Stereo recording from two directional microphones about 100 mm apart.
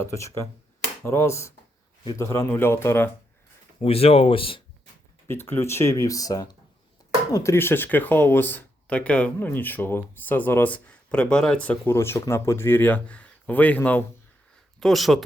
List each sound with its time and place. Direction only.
0.0 s speech: 30° left (ahead or behind)
3.8 s speech: 75° left (ahead or behind)
5.3 s speech: 25° left (ahead or behind); by 6.6 s 40° left (ahead or behind)
7.3 s speech: 25° left (ahead or behind)
11.9 s speech: 25° left (ahead or behind)
14.8 s speech: centre (ahead or behind)